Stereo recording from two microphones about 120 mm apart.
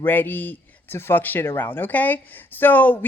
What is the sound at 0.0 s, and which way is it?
Speech, 15° left (ahead or behind).